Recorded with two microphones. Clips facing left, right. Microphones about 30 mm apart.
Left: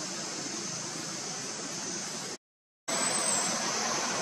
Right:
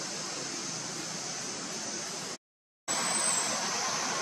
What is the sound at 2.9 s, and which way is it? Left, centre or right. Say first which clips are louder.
Vehicle: left 1 dB; centre.